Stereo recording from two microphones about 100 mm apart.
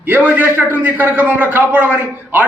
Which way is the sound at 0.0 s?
15° right (ahead or behind).